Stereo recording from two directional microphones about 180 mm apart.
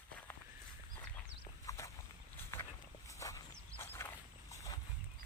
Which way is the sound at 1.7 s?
15° left (ahead or behind).